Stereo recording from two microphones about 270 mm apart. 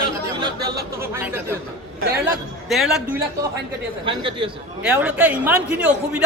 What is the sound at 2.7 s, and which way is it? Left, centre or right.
Speech, centre.